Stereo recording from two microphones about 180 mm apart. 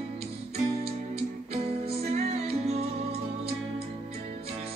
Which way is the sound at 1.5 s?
35° right (ahead or behind).